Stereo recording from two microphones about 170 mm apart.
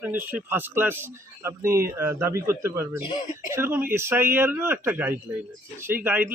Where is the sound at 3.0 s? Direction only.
25° left (ahead or behind).